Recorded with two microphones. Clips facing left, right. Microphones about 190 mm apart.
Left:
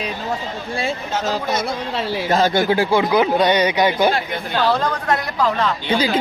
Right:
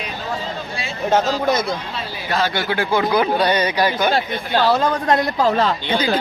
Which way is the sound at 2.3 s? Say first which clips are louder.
Left 4 dB; 45° left (ahead or behind).